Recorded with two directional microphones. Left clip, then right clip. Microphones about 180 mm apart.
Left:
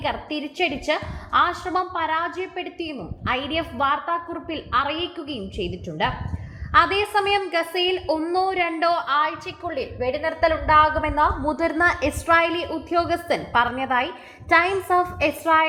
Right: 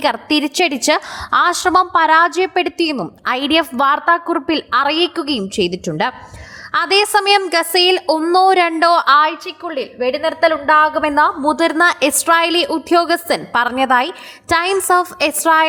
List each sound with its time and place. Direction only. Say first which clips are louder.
0.0 s a woman's voice: right 11 dB; 45° right (ahead or behind)
9.6 s a woman's voice: right 6 dB; 25° right (ahead or behind)